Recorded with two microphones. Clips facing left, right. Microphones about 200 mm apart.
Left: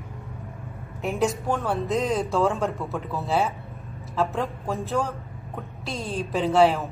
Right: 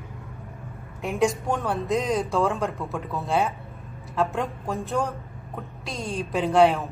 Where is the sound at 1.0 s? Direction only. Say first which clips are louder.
Right 1 dB; centre (ahead or behind).